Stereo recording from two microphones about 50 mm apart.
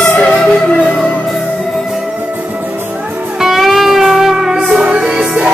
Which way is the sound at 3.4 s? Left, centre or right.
Centre.